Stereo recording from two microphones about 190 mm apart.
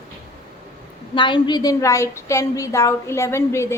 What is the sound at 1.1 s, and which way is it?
A woman's voice, 25° left (ahead or behind).